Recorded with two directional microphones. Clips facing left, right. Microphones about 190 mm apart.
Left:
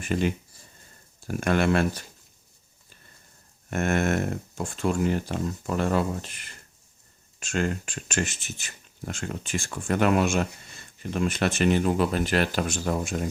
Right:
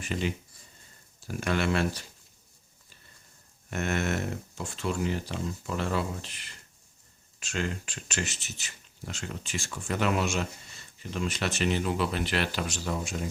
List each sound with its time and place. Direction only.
0.0 s speech: 50° left (ahead or behind)
3.7 s speech: 50° left (ahead or behind)